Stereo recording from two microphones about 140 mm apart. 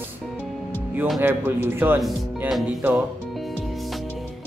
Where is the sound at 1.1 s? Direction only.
15° right (ahead or behind).